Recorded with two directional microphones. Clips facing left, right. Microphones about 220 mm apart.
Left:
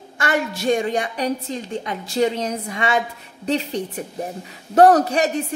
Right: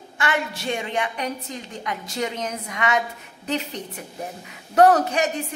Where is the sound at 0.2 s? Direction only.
40° left (ahead or behind).